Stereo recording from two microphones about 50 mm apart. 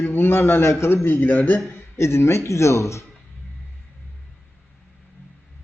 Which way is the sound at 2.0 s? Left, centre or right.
Left.